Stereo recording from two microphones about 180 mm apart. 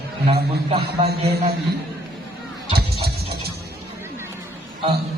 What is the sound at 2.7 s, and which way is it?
Music, 60° right (ahead or behind).